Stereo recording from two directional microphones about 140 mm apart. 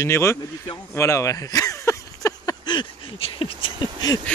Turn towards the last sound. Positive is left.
turn(degrees=30)  # may be behind; listen again after turning